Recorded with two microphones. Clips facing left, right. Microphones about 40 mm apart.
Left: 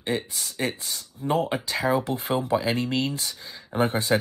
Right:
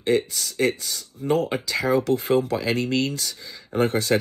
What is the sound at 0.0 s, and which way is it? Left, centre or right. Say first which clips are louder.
Speech: right 6 dB; left.